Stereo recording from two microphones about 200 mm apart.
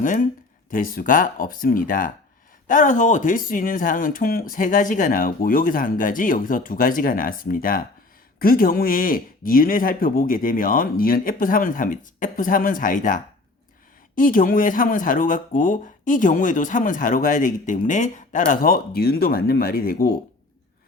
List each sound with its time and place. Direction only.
0.7 s speech: 45° left (ahead or behind)